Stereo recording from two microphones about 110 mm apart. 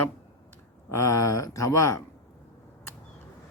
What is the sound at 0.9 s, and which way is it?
A man's voice, 30° left (ahead or behind).